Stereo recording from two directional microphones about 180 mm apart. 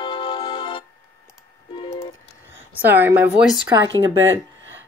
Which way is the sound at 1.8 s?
35° left (ahead or behind).